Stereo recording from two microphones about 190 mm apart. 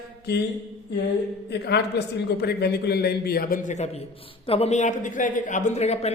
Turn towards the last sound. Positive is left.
turn(degrees=35)  # may be behind; listen again after turning